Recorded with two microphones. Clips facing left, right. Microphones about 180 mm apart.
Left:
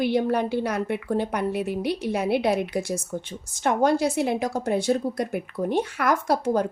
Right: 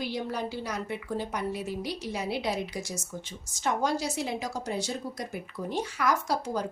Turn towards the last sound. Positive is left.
turn(degrees=55)  # may be behind; listen again after turning